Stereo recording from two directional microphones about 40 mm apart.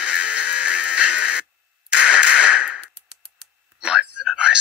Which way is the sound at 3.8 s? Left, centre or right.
Centre.